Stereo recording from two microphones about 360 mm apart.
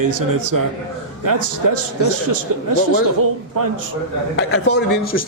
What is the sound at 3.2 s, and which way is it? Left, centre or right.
Speech, right.